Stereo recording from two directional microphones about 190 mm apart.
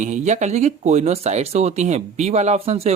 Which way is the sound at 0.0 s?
40° right (ahead or behind).